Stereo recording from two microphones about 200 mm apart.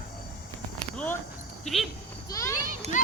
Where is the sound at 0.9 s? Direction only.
10° left (ahead or behind).